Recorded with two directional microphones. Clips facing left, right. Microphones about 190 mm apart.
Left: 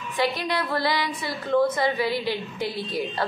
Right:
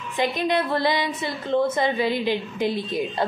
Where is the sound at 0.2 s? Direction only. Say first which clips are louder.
Right 3 dB; 20° right (ahead or behind).